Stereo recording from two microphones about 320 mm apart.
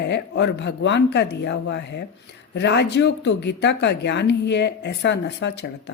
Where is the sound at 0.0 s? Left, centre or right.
Left.